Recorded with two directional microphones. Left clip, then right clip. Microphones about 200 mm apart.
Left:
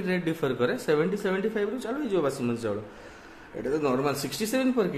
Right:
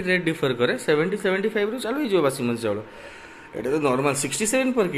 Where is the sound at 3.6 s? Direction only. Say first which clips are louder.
Right 4 dB; 10° right (ahead or behind).